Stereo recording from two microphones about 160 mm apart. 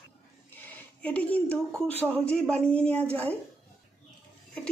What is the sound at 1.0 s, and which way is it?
Speech, 10° left (ahead or behind).